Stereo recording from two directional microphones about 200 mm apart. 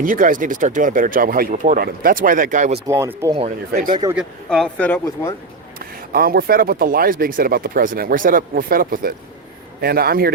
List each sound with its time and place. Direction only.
0.0 s speech: 40° right (ahead or behind)
2.8 s speech: 15° right (ahead or behind)
3.7 s speech: 40° right (ahead or behind)
4.1 s speech: centre (ahead or behind)
5.8 s speech: 50° right (ahead or behind)